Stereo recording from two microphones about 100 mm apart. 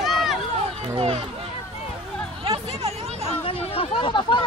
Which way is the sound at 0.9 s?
75° right (ahead or behind).